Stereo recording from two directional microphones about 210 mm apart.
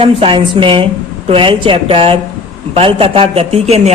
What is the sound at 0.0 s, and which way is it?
A man's voice, 25° right (ahead or behind).